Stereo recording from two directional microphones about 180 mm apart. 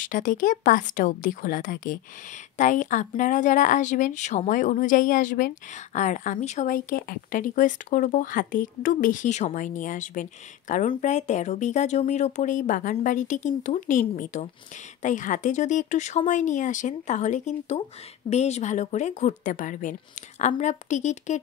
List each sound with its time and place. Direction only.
0.0 s a woman's voice: 50° left (ahead or behind)